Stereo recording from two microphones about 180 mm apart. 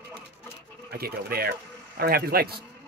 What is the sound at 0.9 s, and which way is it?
Speech, 60° right (ahead or behind).